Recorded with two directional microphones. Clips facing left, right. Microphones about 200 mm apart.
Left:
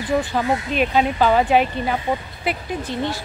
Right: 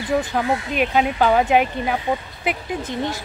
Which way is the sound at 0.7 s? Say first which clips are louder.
Even; 10° right (ahead or behind).